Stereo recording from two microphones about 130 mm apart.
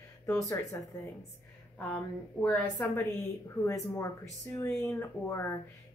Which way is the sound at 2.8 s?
15° left (ahead or behind).